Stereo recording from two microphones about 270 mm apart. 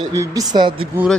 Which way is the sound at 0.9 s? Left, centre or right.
Centre.